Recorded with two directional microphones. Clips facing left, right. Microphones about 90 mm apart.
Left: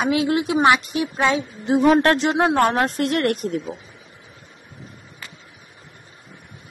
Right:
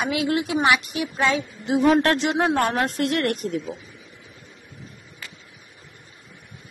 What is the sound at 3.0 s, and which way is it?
Speech, 50° left (ahead or behind).